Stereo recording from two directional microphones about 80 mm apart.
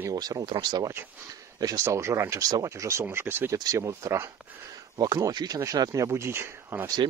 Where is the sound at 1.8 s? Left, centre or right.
Right.